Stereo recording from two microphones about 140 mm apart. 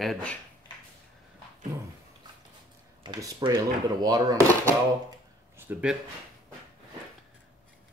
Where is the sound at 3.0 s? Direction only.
30° right (ahead or behind).